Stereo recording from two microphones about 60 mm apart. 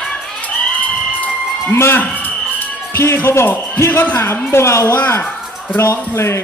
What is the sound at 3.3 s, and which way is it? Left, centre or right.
Speech, left.